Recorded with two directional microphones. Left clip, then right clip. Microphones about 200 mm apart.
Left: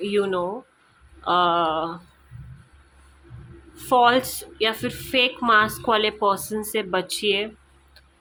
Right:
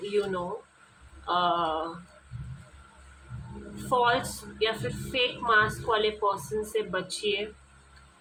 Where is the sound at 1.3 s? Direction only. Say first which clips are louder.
Left 6 dB; 50° left (ahead or behind).